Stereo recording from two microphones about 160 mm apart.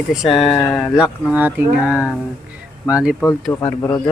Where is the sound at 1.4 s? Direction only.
10° right (ahead or behind).